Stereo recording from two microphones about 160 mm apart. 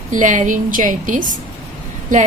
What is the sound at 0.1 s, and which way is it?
A woman's voice, 50° right (ahead or behind).